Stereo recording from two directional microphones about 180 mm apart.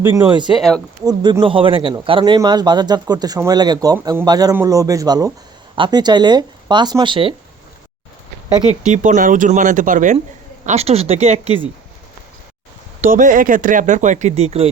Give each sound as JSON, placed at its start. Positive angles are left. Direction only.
{"t": 0.0, "sound": "speech", "side_deg": -20}
{"t": 0.5, "sound": "speech", "side_deg": 0}
{"t": 1.0, "sound": "speech", "side_deg": -25}
{"t": 8.8, "sound": "speech", "side_deg": -45}
{"t": 10.7, "sound": "speech", "side_deg": -35}
{"t": 13.0, "sound": "speech", "side_deg": -45}